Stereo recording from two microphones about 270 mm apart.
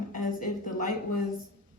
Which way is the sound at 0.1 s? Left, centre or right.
Left.